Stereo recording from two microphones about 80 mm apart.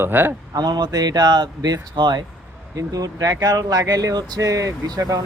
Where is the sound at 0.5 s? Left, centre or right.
Right.